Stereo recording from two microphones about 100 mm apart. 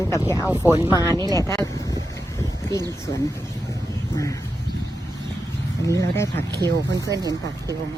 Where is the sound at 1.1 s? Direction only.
40° right (ahead or behind).